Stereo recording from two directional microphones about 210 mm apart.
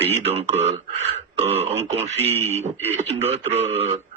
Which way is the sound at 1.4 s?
30° right (ahead or behind).